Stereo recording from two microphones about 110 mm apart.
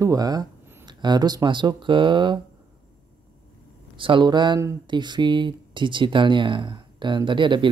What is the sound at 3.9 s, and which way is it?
Speech, 50° right (ahead or behind).